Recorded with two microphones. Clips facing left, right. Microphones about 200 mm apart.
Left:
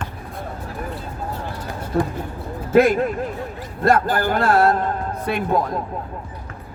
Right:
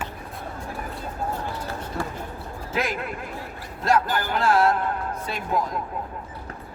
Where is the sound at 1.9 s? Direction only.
60° left (ahead or behind).